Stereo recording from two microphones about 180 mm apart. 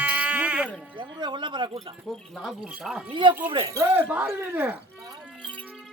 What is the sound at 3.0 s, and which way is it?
Speech, 25° right (ahead or behind).